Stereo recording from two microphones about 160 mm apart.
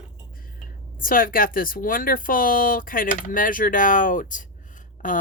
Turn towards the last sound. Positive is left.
turn(degrees=55)  # may be behind; listen again after turning